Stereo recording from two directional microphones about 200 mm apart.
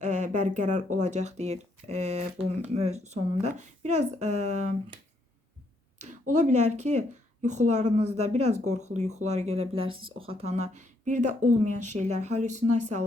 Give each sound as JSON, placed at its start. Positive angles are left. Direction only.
{"t": 0.0, "sound": "speech", "side_deg": -35}
{"t": 6.0, "sound": "speech", "side_deg": -35}